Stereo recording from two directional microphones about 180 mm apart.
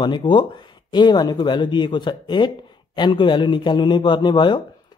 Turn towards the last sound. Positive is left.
turn(degrees=25)  # may be behind; listen again after turning